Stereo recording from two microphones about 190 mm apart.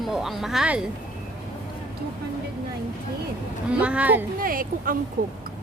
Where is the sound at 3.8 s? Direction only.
5° right (ahead or behind).